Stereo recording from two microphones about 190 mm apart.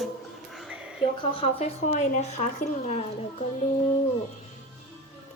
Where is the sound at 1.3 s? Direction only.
35° left (ahead or behind).